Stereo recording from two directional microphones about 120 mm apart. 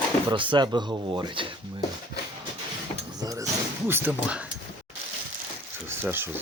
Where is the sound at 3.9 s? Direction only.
15° right (ahead or behind).